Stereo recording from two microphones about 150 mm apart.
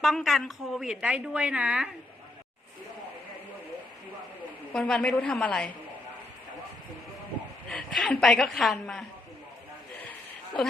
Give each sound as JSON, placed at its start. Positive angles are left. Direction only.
{"t": 0.0, "sound": "a woman's voice", "side_deg": 0}
{"t": 4.7, "sound": "a woman's voice", "side_deg": 5}
{"t": 7.7, "sound": "a woman's voice", "side_deg": 5}